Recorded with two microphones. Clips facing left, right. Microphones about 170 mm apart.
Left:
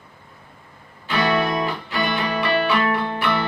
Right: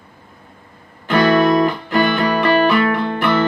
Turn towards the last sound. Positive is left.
turn(degrees=-50)  # may be behind; listen again after turning